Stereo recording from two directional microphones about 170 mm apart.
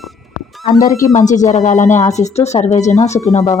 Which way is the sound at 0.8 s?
55° left (ahead or behind).